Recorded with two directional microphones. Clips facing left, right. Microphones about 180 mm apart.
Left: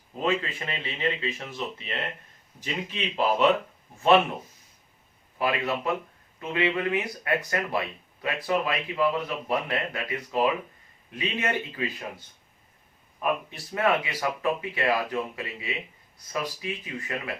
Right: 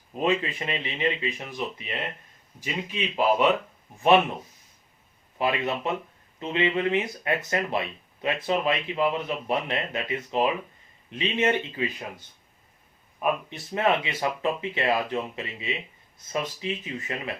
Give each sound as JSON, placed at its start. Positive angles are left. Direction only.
{"t": 0.1, "sound": "speech", "side_deg": -20}
{"t": 5.4, "sound": "speech", "side_deg": -20}
{"t": 13.5, "sound": "speech", "side_deg": -25}